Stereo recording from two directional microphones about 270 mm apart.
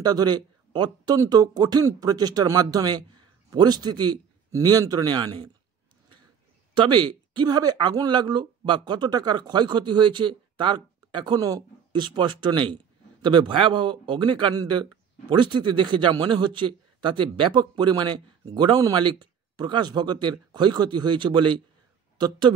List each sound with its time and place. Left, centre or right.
0.0 s speech: centre
6.7 s speech: centre